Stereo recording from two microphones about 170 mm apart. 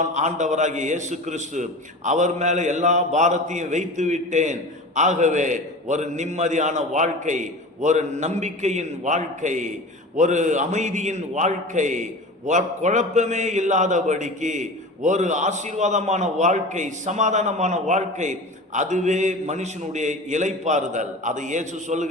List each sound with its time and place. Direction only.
0.0 s a man's voice: 45° right (ahead or behind)